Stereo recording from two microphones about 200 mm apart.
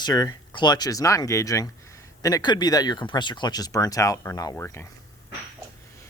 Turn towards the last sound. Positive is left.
turn(degrees=10)  # may be behind; listen again after turning